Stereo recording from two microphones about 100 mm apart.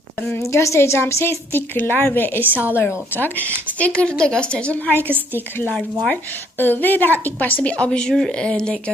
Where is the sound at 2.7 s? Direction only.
25° left (ahead or behind).